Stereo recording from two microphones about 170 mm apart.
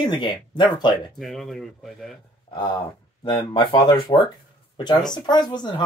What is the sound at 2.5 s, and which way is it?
Speech, 30° left (ahead or behind).